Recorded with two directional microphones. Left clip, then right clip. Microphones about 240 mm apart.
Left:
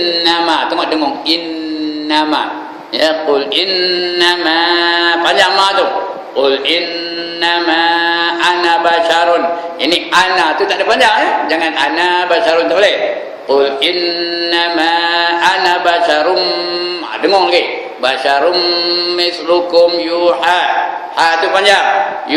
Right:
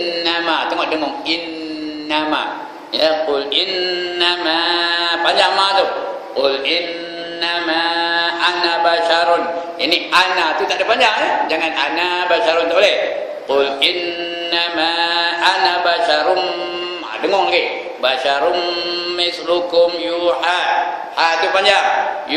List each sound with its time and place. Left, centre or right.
0.2 s a sound: centre
2.0 s a man's voice: centre
7.4 s mantra: centre
9.8 s a man's voice: centre
14.5 s mantra: centre
17.2 s a man's voice: centre